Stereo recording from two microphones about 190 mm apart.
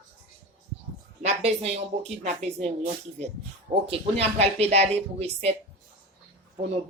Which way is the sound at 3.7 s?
30° right (ahead or behind).